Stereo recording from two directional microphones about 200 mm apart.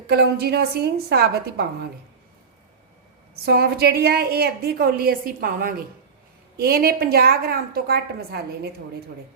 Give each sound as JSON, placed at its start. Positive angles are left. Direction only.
{"t": 0.1, "sound": "a woman's voice", "side_deg": -55}
{"t": 3.3, "sound": "a woman's voice", "side_deg": -50}